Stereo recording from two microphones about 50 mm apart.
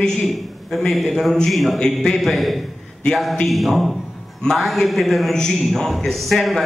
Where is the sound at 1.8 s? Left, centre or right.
Centre.